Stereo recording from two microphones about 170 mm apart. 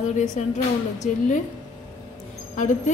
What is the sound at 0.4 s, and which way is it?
A woman's voice, 45° left (ahead or behind).